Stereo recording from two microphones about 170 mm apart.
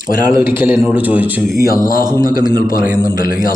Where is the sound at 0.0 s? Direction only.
55° left (ahead or behind).